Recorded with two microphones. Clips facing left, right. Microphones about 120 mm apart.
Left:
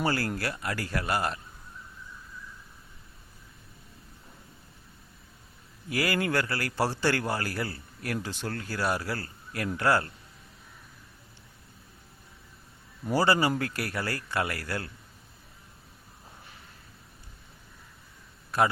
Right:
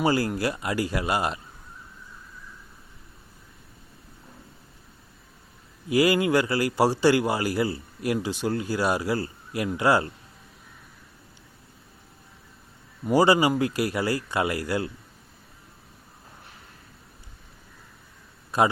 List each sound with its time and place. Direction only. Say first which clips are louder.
0.0 s speech: right 6 dB; 15° right (ahead or behind)
5.9 s speech: right 7 dB; 15° right (ahead or behind)
13.1 s speech: right 5 dB; 15° right (ahead or behind)
18.5 s a man's voice: right 3 dB; 15° right (ahead or behind)